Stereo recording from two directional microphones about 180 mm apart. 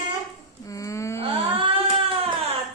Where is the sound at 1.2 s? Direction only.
30° right (ahead or behind).